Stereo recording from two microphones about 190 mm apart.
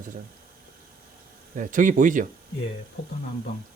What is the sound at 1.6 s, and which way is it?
Speech, 45° right (ahead or behind).